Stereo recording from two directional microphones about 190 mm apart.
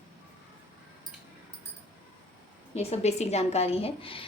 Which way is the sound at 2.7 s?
35° left (ahead or behind).